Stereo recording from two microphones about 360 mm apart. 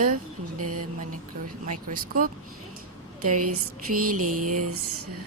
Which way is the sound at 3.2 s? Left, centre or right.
Right.